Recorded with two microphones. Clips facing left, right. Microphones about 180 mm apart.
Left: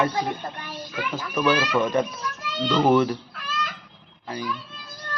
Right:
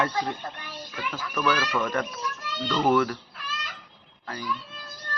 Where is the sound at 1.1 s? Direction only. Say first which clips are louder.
Left 4 dB; 20° left (ahead or behind).